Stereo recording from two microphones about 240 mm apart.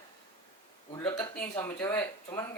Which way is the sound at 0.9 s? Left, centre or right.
Centre.